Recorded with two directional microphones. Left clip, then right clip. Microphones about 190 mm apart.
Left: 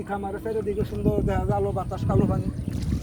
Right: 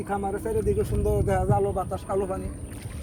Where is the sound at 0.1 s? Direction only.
45° right (ahead or behind); by 2.0 s 20° right (ahead or behind).